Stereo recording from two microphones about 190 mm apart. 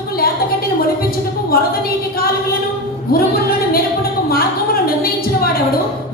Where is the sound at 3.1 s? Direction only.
50° left (ahead or behind).